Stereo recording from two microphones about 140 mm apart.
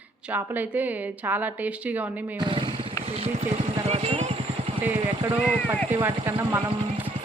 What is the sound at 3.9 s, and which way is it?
Vehicle, 45° right (ahead or behind).